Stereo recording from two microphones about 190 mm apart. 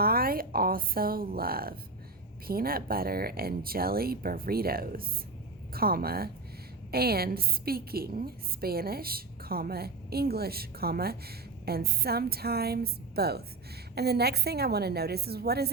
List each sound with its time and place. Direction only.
0.0 s a woman's voice: 50° right (ahead or behind)